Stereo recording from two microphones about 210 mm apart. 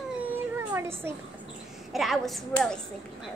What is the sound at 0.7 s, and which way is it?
Speech, 10° right (ahead or behind).